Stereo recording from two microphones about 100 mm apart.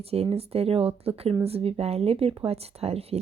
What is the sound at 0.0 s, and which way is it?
Speech, 85° right.